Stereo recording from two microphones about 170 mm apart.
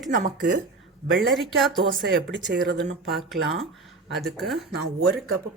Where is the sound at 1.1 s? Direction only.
Centre (ahead or behind).